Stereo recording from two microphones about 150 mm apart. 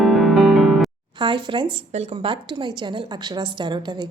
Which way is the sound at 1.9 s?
45° right (ahead or behind).